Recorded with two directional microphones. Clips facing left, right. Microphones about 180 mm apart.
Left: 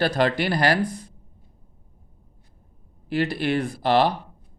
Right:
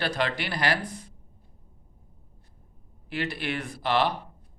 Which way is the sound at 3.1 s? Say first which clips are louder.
Left 8 dB; 35° left (ahead or behind).